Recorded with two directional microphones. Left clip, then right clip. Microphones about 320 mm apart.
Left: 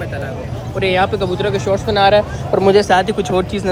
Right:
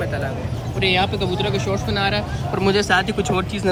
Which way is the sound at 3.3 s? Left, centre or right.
Left.